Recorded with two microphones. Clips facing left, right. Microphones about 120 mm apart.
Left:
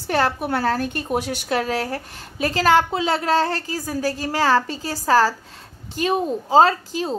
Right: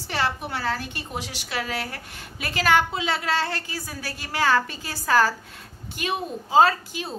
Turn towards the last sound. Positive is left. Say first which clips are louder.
# left 5 dB
turn(degrees=35)  # may be behind; listen again after turning